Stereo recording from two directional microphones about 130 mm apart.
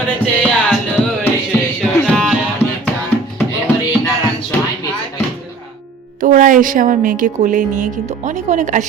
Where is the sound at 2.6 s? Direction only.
50° left (ahead or behind).